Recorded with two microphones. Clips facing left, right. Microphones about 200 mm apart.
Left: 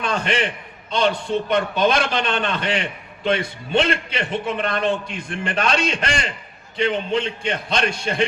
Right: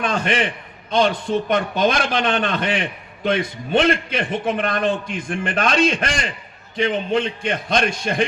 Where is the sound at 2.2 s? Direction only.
55° right (ahead or behind).